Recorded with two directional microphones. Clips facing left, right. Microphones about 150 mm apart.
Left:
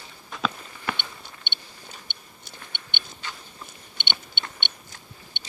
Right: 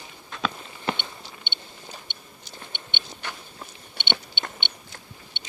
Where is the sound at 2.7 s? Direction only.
55° left (ahead or behind).